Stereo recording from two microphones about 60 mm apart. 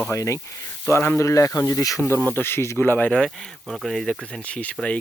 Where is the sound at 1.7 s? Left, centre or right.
Left.